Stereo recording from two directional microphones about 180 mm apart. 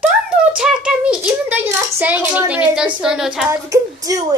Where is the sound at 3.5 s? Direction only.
20° right (ahead or behind).